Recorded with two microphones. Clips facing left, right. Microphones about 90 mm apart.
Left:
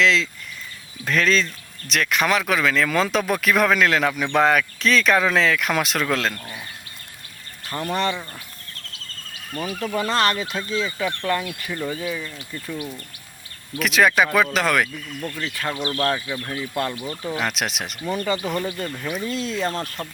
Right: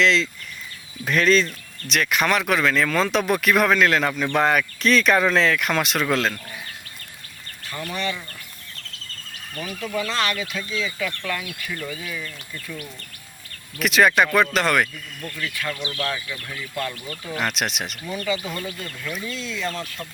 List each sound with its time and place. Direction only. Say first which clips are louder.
0.0 s speech: even; centre (ahead or behind)
7.7 s speech: left 5 dB; 40° left (ahead or behind)
9.6 s speech: left 3 dB; 40° left (ahead or behind); by 12.9 s 20° left (ahead or behind)
13.7 s speech: even; centre (ahead or behind)
15.2 s speech: left 1 dB; 25° left (ahead or behind)
15.8 s speech: left 8 dB; 40° left (ahead or behind)
16.2 s speech: left 5 dB; 30° left (ahead or behind)
17.3 s speech: right 2 dB; centre (ahead or behind)
18.3 s speech: left 1 dB; 45° left (ahead or behind)